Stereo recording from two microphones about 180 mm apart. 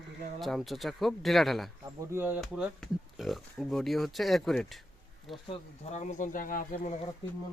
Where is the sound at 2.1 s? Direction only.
10° right (ahead or behind).